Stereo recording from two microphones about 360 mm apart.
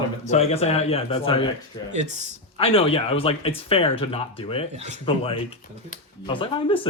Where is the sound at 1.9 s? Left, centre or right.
Centre.